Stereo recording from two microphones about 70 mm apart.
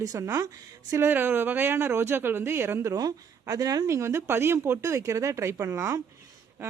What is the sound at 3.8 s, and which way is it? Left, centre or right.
Speech, right.